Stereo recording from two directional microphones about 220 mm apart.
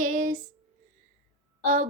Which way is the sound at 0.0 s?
35° right (ahead or behind).